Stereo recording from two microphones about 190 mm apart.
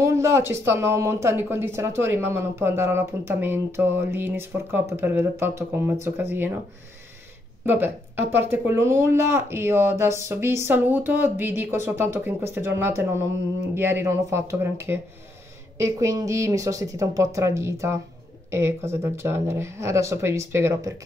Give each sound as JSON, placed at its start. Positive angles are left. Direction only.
{"t": 0.0, "sound": "speech", "side_deg": -15}
{"t": 7.6, "sound": "speech", "side_deg": -10}